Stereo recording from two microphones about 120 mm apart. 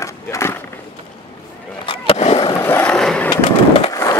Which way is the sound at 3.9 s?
30° left (ahead or behind).